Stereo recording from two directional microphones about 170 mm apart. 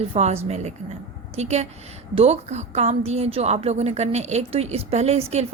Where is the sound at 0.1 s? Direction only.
40° right (ahead or behind).